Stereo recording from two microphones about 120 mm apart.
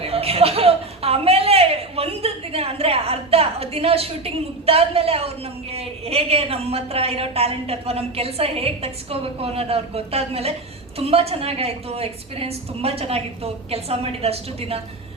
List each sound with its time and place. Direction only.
0.0 s chuckle: 55° right (ahead or behind)
5.7 s a woman's voice: 55° right (ahead or behind)